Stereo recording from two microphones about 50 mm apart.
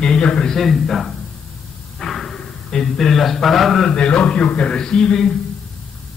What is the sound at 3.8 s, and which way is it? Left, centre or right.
A man's voice, centre.